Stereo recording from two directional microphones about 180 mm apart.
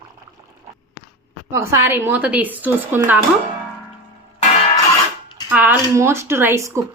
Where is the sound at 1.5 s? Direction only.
15° right (ahead or behind).